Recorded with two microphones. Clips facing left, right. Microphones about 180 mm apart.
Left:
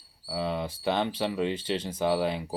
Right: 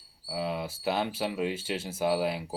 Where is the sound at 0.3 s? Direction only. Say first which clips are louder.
Left 2 dB; 5° right (ahead or behind).